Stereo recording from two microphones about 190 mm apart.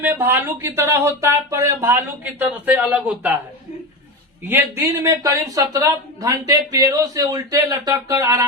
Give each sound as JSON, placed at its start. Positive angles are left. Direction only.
{"t": 0.0, "sound": "speech", "side_deg": -10}
{"t": 4.4, "sound": "speech", "side_deg": -15}